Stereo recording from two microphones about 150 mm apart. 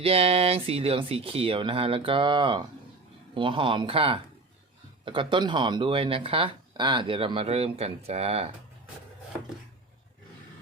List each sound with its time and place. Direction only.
0.0 s speech: 40° right (ahead or behind)